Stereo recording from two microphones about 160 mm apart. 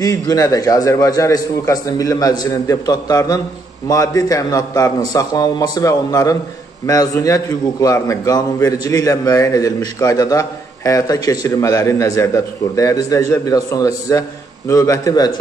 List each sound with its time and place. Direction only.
0.0 s a man's voice: 20° left (ahead or behind)